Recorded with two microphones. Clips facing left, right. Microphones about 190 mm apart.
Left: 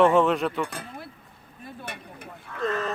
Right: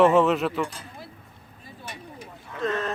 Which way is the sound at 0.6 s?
60° left (ahead or behind).